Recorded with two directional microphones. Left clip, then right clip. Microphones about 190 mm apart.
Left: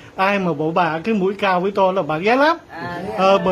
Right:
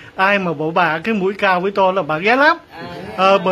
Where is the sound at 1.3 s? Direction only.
Centre (ahead or behind).